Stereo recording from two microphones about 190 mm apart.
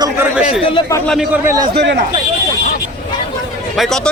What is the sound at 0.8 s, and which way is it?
Speech, 20° left (ahead or behind).